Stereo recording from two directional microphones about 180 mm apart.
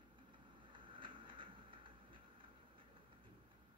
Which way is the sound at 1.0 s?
30° right (ahead or behind).